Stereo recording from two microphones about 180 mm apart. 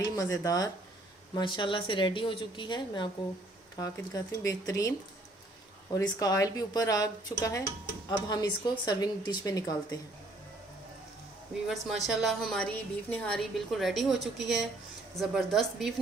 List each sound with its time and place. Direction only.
0.2 s speech: 20° left (ahead or behind)
11.7 s a woman's voice: centre (ahead or behind)